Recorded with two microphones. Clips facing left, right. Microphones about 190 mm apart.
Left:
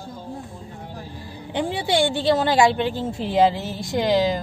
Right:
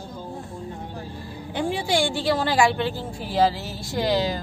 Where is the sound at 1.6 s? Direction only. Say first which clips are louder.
Left 2 dB; 20° left (ahead or behind).